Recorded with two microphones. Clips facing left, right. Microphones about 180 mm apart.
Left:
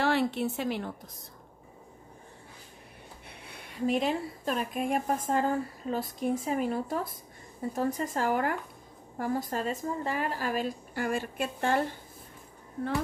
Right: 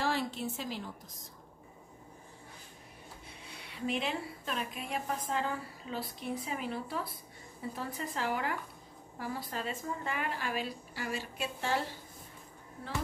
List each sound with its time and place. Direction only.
0.0 s a woman's voice: 65° left (ahead or behind)
3.3 s speech: 60° left (ahead or behind)